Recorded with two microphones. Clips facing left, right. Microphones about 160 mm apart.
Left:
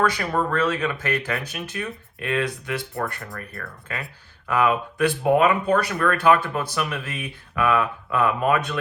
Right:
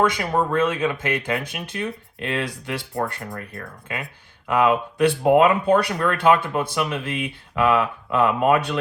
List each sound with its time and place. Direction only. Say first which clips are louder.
0.0 s speech: right 2 dB; 20° right (ahead or behind)
3.3 s speech: right 2 dB; 20° right (ahead or behind)